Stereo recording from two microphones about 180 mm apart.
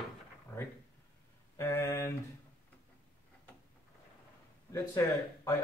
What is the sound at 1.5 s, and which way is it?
Speech, 15° left (ahead or behind).